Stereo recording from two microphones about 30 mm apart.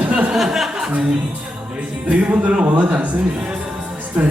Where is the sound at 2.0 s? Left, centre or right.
Right.